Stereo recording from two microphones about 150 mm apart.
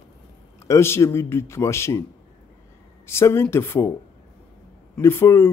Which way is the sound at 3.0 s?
15° left (ahead or behind).